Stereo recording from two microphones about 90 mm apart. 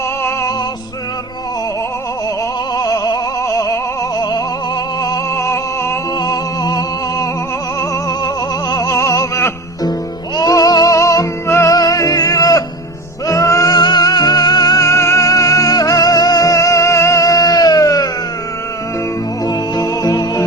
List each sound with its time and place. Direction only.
2.7 s opera: 40° left (ahead or behind)
4.2 s music: 50° left (ahead or behind)
5.4 s music: 30° left (ahead or behind)
6.1 s music: 45° left (ahead or behind)
8.7 s music: 40° left (ahead or behind)
11.7 s music: 40° left (ahead or behind)
19.5 s music: 45° left (ahead or behind)